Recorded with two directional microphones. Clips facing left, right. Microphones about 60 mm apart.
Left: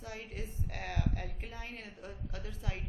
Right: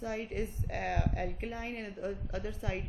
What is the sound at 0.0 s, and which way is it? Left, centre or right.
Speech, right.